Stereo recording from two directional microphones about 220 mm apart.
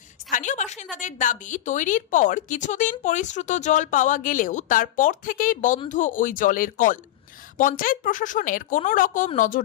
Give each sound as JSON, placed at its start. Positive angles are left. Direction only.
{"t": 0.3, "sound": "a woman's voice", "side_deg": 35}